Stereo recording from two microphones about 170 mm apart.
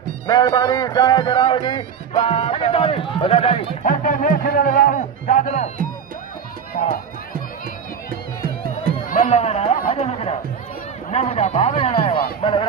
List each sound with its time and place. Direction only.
0.3 s speech: 25° left (ahead or behind)
3.8 s a man's voice: 50° left (ahead or behind)
9.0 s run: 50° left (ahead or behind)
9.9 s music: 35° left (ahead or behind)
11.1 s speech: 35° left (ahead or behind)